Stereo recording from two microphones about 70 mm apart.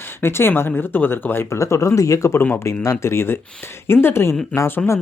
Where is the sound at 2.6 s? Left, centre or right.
Left.